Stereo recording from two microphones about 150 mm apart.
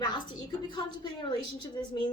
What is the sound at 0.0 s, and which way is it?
A woman's voice, 30° left (ahead or behind).